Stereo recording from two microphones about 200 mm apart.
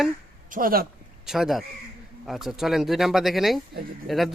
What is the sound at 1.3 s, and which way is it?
Speech, centre (ahead or behind).